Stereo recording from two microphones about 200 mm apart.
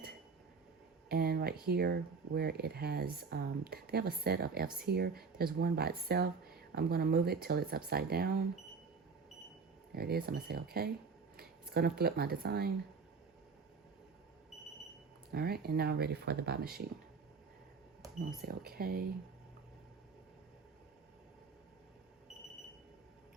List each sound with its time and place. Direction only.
1.0 s speech: 50° right (ahead or behind)
9.9 s speech: 50° right (ahead or behind)
15.3 s speech: 50° right (ahead or behind)
18.4 s speech: 50° right (ahead or behind)